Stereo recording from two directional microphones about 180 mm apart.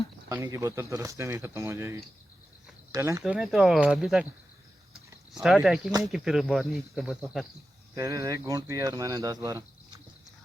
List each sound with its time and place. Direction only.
0.3 s speech: 15° right (ahead or behind)
3.3 s speech: centre (ahead or behind)
5.3 s speech: centre (ahead or behind)
7.9 s speech: 15° right (ahead or behind)